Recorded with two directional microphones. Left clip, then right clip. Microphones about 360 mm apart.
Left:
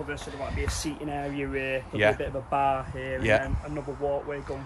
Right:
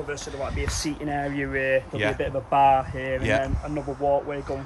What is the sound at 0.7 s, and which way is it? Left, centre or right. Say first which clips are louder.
Speech: right 4 dB; right.